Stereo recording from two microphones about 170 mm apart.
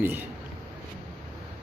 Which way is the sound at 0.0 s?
10° right (ahead or behind).